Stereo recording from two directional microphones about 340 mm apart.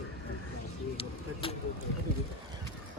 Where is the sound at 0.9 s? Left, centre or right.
Centre.